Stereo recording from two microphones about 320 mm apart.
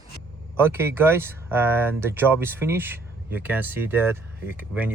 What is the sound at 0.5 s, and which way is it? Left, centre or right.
Speech, centre.